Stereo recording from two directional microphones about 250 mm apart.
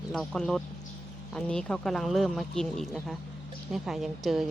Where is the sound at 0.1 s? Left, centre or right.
Centre.